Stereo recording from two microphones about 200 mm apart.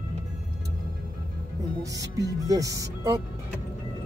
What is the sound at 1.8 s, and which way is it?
Speech, 15° right (ahead or behind).